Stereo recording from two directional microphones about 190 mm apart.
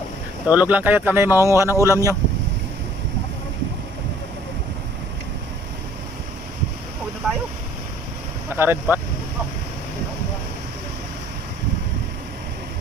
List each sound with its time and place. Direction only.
0.5 s speech: 10° right (ahead or behind)
8.5 s speech: 10° right (ahead or behind)